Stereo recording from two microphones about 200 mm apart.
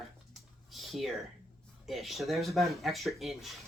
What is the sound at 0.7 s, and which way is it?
Speech, centre (ahead or behind).